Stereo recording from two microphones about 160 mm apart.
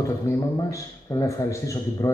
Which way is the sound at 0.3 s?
20° left (ahead or behind).